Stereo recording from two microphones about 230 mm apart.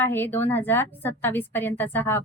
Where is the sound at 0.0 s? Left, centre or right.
Centre.